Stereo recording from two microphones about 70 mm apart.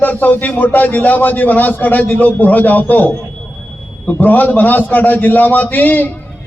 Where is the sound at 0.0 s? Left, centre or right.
Left.